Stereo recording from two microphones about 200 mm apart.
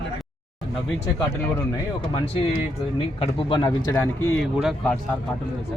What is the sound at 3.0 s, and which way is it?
Speech, 25° left (ahead or behind).